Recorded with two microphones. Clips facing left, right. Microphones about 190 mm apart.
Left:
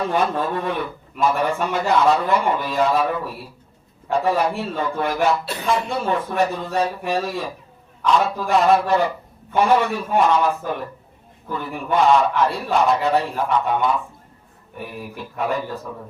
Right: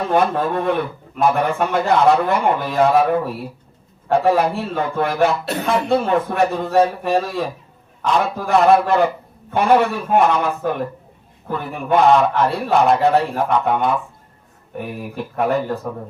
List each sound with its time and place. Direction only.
0.1 s a man's voice: 55° right (ahead or behind)
15.1 s a man's voice: 55° right (ahead or behind)